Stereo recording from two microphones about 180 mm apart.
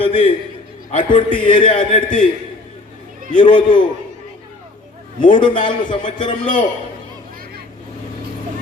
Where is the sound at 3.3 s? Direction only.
25° left (ahead or behind).